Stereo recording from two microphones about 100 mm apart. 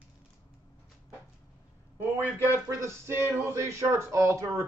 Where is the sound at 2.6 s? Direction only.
30° right (ahead or behind).